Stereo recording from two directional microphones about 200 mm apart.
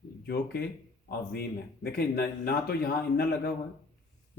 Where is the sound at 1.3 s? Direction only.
50° left (ahead or behind).